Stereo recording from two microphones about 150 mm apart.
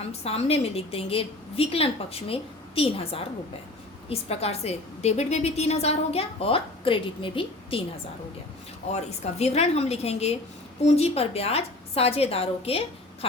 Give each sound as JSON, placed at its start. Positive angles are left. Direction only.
{"t": 0.0, "sound": "a woman's voice", "side_deg": 45}
{"t": 8.9, "sound": "a woman's voice", "side_deg": 45}